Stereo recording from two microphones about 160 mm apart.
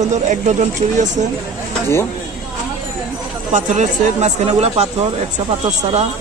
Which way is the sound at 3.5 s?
50° right (ahead or behind).